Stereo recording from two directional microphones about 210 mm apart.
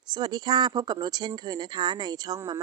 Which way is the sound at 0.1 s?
20° right (ahead or behind).